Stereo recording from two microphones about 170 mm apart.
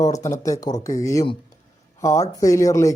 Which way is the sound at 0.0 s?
20° left (ahead or behind).